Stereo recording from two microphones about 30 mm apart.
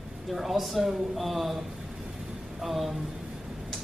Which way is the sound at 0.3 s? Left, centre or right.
Centre.